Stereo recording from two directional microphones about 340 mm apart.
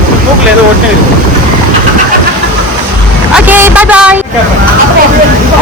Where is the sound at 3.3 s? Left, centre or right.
Centre.